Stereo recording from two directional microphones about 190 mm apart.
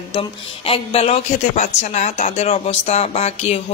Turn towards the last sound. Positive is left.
turn(degrees=35)  # may be behind; listen again after turning